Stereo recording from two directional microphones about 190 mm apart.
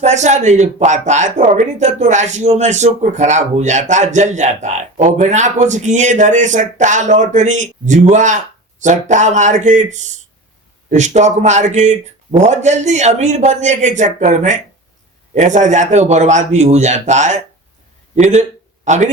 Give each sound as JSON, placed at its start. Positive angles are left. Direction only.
{"t": 0.0, "sound": "speech", "side_deg": -40}